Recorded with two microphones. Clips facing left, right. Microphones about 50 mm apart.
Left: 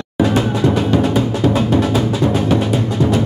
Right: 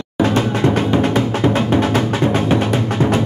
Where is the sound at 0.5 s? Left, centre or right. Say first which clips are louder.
Even; right.